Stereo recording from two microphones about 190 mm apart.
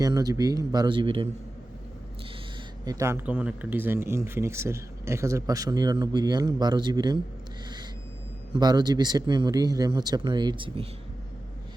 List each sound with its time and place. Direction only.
0.0 s speech: 20° right (ahead or behind)
2.8 s speech: 15° right (ahead or behind)
8.5 s speech: 20° right (ahead or behind)